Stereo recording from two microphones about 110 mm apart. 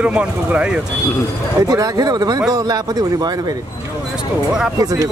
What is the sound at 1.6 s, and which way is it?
Speech, 35° right (ahead or behind).